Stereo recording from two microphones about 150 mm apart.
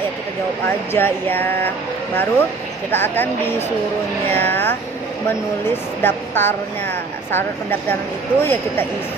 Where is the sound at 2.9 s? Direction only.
15° left (ahead or behind).